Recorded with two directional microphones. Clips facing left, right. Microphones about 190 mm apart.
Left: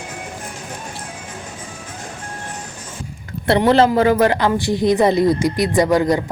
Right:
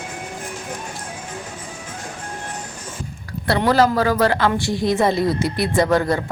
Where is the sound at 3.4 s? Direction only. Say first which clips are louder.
Left 3 dB; 25° left (ahead or behind).